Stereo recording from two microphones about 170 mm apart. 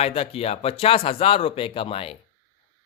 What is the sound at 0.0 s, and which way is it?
Speech, 35° left (ahead or behind).